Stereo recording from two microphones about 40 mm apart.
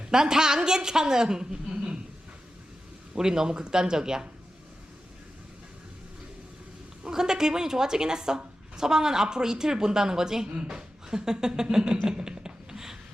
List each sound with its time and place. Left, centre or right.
0.1 s a woman's voice: centre
3.2 s a woman's voice: centre
7.0 s a woman's voice: centre
12.0 s a sound: centre